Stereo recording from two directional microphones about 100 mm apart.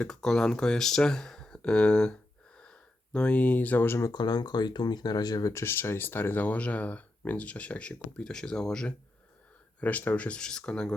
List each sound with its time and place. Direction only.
0.0 s speech: 5° left (ahead or behind)
2.6 s a sound: 10° left (ahead or behind)
4.1 s speech: 45° left (ahead or behind)
5.6 s speech: 25° left (ahead or behind); by 8.9 s 5° left (ahead or behind)
9.8 s speech: 15° left (ahead or behind)